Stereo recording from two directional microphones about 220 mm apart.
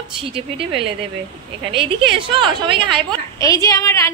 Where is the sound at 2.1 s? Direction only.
25° right (ahead or behind).